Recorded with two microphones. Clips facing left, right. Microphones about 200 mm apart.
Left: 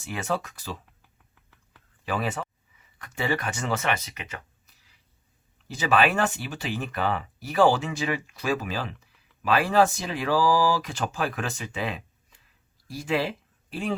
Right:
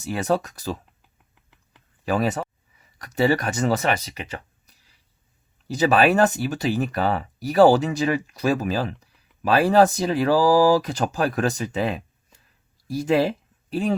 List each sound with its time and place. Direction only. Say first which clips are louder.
0.0 s speech: right 7 dB; 40° right (ahead or behind)
1.0 s a sound: right 1 dB; 20° right (ahead or behind)
2.0 s speech: right 6 dB; 40° right (ahead or behind)
5.7 s speech: right 5 dB; 40° right (ahead or behind)